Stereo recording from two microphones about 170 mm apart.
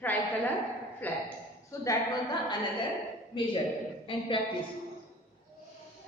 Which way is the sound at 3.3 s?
30° left (ahead or behind).